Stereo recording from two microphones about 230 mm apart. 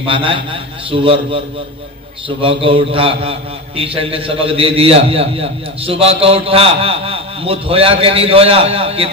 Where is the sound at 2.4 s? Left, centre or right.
Right.